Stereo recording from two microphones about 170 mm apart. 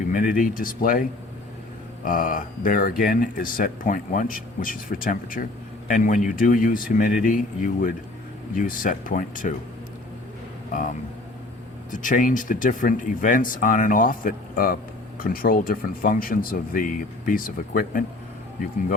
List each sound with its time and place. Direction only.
0.1 s speech: 55° left (ahead or behind)
2.0 s speech: 55° left (ahead or behind)
10.7 s speech: 50° left (ahead or behind)